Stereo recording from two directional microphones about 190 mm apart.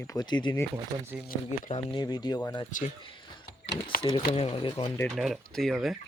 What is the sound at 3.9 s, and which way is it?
Speech, 50° left (ahead or behind).